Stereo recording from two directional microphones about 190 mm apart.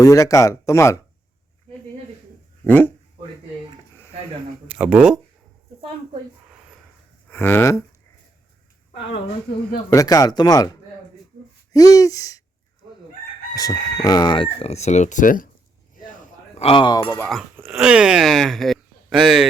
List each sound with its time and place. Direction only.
0.0 s speech: 15° left (ahead or behind)
2.6 s speech: 10° left (ahead or behind)
4.7 s speech: 5° right (ahead or behind)
7.3 s speech: 10° left (ahead or behind)
9.9 s speech: 20° left (ahead or behind)
11.7 s speech: 20° left (ahead or behind)
13.5 s speech: 20° left (ahead or behind); by 15.4 s 45° left (ahead or behind)
16.6 s speech: 30° left (ahead or behind)
17.7 s speech: 5° right (ahead or behind)